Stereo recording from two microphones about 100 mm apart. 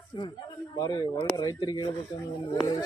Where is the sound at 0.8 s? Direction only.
40° left (ahead or behind).